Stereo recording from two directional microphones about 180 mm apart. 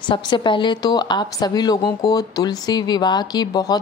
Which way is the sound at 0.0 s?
25° left (ahead or behind).